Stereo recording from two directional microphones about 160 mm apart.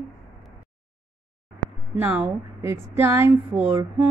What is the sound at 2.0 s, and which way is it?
Speech, 10° right (ahead or behind).